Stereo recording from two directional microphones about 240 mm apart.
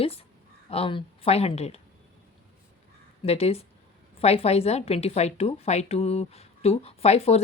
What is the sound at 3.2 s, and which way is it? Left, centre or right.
A woman's voice, left.